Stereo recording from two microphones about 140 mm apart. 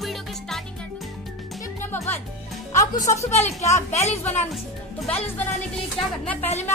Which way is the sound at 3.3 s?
50° left (ahead or behind).